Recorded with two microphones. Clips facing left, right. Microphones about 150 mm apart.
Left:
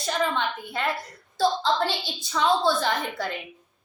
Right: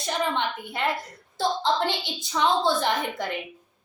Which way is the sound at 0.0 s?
20° right (ahead or behind).